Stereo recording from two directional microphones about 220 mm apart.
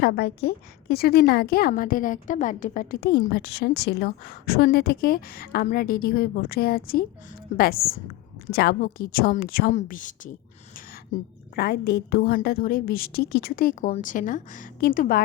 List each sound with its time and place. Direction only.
0.0 s a woman's voice: 45° left (ahead or behind)
11.5 s a woman's voice: 45° left (ahead or behind)